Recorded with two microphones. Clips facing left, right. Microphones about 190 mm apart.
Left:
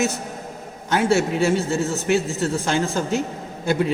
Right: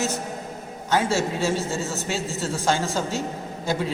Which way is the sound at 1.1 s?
65° left (ahead or behind).